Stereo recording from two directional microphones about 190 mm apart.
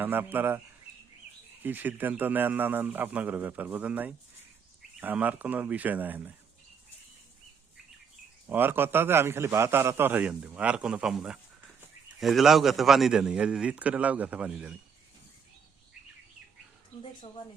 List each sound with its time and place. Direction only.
0.0 s a man's voice: 10° right (ahead or behind)
1.6 s a man's voice: 10° right (ahead or behind)
8.4 s a man's voice: 10° right (ahead or behind)
17.0 s speech: 30° left (ahead or behind)